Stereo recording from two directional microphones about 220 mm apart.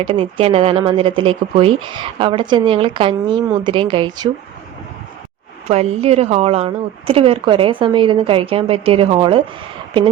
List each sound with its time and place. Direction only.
0.0 s speech: 25° right (ahead or behind)
5.6 s speech: 30° right (ahead or behind)